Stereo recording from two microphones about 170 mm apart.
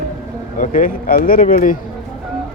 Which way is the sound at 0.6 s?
50° left (ahead or behind).